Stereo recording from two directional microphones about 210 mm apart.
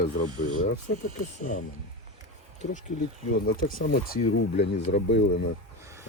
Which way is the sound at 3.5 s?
45° left (ahead or behind).